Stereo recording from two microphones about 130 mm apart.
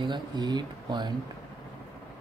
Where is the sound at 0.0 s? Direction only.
35° right (ahead or behind).